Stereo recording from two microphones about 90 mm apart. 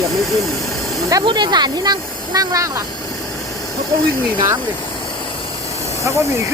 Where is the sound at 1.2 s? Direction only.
60° right (ahead or behind); by 2.8 s 40° right (ahead or behind).